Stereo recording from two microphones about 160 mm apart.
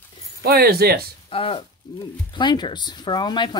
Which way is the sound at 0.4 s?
75° right (ahead or behind).